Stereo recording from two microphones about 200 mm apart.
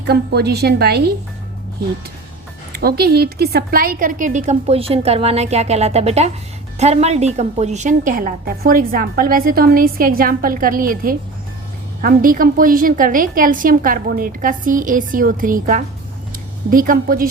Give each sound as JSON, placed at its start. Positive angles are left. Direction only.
{"t": 0.1, "sound": "a woman's voice", "side_deg": -55}
{"t": 2.7, "sound": "a woman's voice", "side_deg": -50}